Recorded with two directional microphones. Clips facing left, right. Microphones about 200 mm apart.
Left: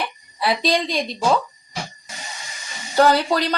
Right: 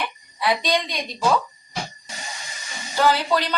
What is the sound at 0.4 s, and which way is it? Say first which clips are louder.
Speech: left 2 dB; 30° left (ahead or behind).